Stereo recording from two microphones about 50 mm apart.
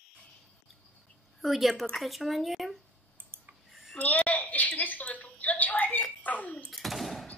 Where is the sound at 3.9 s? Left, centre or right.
Left.